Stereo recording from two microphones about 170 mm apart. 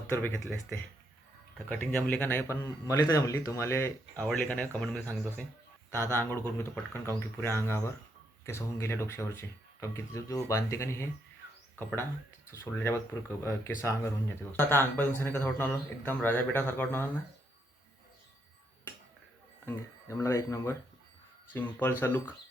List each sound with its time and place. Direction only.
0.1 s speech: 15° left (ahead or behind)
1.5 s speech: 10° left (ahead or behind)
12.5 s speech: 15° left (ahead or behind)
19.6 s speech: 15° left (ahead or behind)